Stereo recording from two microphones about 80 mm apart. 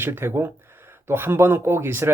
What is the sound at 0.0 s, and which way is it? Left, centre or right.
Speech, right.